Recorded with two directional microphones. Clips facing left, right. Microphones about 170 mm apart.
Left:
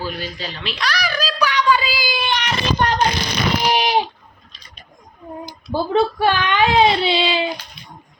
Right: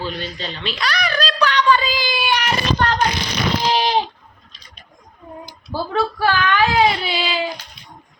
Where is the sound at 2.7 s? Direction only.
15° left (ahead or behind).